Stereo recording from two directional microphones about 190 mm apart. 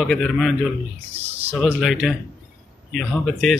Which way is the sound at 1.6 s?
5° right (ahead or behind).